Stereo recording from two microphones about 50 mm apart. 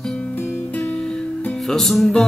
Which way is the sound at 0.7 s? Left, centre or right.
Left.